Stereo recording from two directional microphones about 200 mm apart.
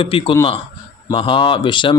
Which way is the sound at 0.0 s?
25° left (ahead or behind).